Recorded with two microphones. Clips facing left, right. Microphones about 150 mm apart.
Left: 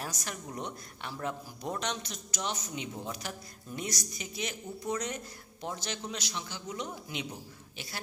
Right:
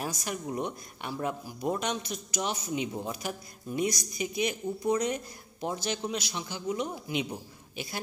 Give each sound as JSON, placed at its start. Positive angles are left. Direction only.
{"t": 0.0, "sound": "a woman's voice", "side_deg": -10}